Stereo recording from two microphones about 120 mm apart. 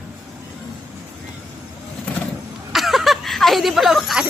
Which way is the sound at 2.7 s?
Centre (ahead or behind).